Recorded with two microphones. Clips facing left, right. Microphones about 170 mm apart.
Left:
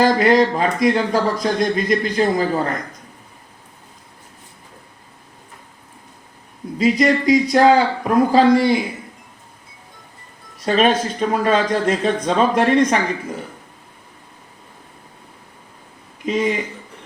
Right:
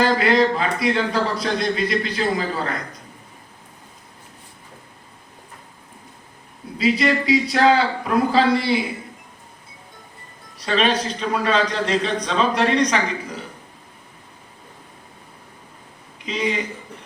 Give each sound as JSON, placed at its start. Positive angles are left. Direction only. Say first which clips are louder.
{"t": 0.0, "sound": "speech", "louder": "left 3 dB", "side_deg": 40}
{"t": 6.7, "sound": "speech", "louder": "left 3 dB", "side_deg": 45}
{"t": 10.7, "sound": "speech", "louder": "left 4 dB", "side_deg": 50}
{"t": 16.2, "sound": "speech", "louder": "left 5 dB", "side_deg": 50}